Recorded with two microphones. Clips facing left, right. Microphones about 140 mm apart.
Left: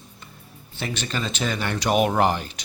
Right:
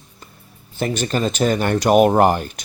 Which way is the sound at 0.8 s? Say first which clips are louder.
Right 8 dB; 45° right (ahead or behind).